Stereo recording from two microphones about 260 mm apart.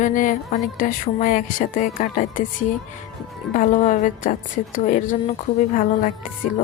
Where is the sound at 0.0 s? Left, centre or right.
Left.